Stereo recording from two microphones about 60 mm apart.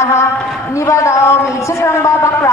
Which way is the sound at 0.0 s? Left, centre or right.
Left.